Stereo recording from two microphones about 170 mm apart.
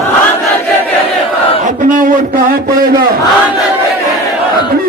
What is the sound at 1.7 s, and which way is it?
A man's voice, 50° right (ahead or behind).